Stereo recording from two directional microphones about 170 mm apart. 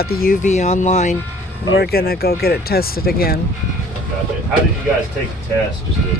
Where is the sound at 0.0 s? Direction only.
65° left (ahead or behind); by 1.1 s 45° left (ahead or behind).